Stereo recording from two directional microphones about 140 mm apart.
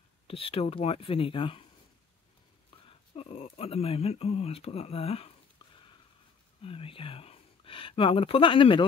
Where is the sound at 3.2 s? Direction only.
45° left (ahead or behind).